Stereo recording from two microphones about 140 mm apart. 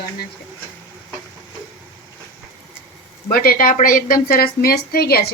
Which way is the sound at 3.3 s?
90° left.